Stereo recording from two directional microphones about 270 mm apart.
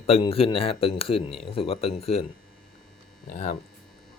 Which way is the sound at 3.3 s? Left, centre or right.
Left.